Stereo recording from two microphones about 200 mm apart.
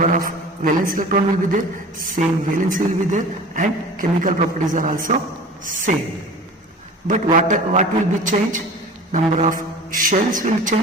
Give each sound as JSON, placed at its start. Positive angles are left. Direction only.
{"t": 0.0, "sound": "a man's voice", "side_deg": -45}
{"t": 7.1, "sound": "a man's voice", "side_deg": -40}